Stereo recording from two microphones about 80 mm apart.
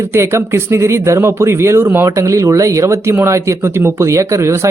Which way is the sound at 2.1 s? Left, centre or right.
Right.